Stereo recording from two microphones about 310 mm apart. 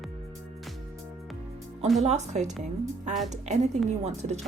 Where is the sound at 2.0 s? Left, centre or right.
Right.